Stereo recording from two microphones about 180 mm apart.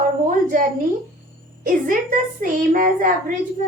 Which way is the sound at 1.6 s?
50° right (ahead or behind).